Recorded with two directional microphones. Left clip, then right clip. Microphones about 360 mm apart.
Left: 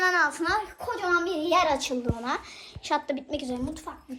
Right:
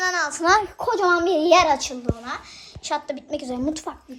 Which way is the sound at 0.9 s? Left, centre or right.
Centre.